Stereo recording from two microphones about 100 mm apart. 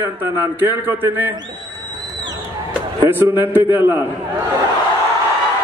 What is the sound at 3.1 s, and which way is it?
Speech, 20° right (ahead or behind).